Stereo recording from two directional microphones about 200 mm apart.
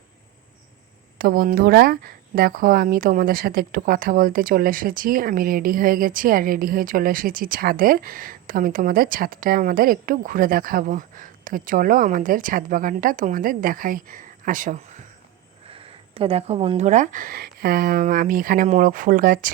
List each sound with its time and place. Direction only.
1.2 s speech: 45° right (ahead or behind)
15.7 s speech: 30° right (ahead or behind); by 19.5 s 45° right (ahead or behind)